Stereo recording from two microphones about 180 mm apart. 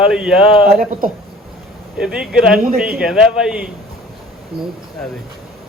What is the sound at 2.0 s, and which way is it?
Speech, 5° right (ahead or behind).